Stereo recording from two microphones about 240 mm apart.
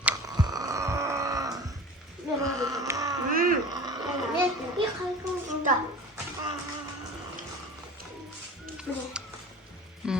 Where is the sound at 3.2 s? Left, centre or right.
Right.